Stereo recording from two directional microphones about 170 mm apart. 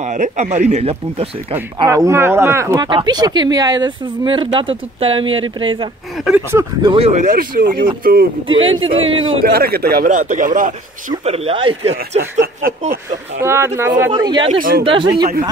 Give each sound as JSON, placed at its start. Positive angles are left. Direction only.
{"t": 0.0, "sound": "speech", "side_deg": -45}
{"t": 1.9, "sound": "speech", "side_deg": -20}
{"t": 2.8, "sound": "speech", "side_deg": -25}
{"t": 6.1, "sound": "speech", "side_deg": 0}
{"t": 6.5, "sound": "speech", "side_deg": -25}
{"t": 7.1, "sound": "speech", "side_deg": -50}
{"t": 8.5, "sound": "speech", "side_deg": -30}
{"t": 9.4, "sound": "speech", "side_deg": -60}
{"t": 10.0, "sound": "speech", "side_deg": -45}
{"t": 11.2, "sound": "speech", "side_deg": -35}
{"t": 12.6, "sound": "speech", "side_deg": -55}
{"t": 13.4, "sound": "speech", "side_deg": -15}
{"t": 14.2, "sound": "speech", "side_deg": -30}